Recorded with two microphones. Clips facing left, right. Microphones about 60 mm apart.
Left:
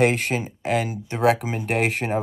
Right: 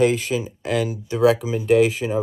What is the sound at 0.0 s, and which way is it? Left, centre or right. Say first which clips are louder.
Speech: right 1 dB; left.